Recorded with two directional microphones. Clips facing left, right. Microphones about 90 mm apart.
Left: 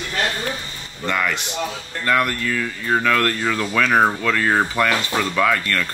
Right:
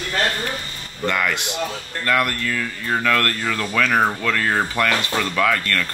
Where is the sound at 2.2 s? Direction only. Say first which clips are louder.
Left 1 dB; 5° left (ahead or behind).